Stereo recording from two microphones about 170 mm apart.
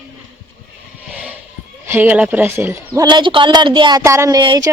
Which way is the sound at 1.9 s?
10° right (ahead or behind).